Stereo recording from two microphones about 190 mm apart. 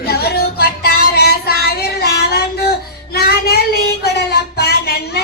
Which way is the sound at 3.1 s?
55° left (ahead or behind).